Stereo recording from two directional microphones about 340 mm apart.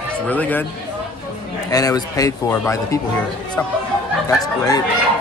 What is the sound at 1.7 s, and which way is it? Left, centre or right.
A man's voice, centre.